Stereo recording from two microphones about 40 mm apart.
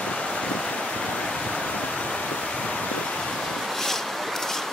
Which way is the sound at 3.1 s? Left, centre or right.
Centre.